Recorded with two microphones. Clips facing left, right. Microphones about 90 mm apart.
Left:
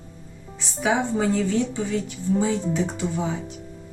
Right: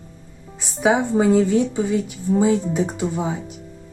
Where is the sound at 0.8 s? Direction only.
20° right (ahead or behind).